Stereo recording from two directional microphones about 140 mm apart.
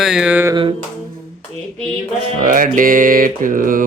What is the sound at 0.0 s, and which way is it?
Music, 5° right (ahead or behind).